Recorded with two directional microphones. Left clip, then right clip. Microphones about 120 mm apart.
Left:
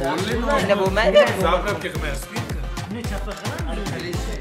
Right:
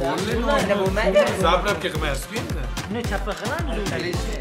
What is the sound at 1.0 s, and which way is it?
Speech, 15° left (ahead or behind).